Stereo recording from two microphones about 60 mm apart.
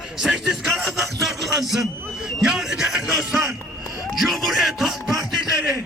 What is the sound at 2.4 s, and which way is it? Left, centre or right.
Music, centre.